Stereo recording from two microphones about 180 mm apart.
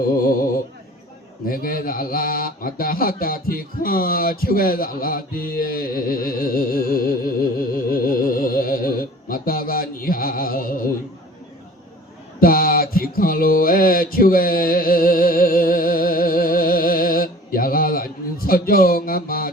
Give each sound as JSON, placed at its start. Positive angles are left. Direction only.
{"t": 1.5, "sound": "mantra", "side_deg": 55}
{"t": 7.9, "sound": "speech", "side_deg": 50}
{"t": 12.4, "sound": "mantra", "side_deg": 55}